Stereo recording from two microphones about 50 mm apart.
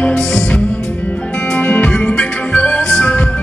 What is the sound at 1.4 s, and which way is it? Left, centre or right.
Music, left.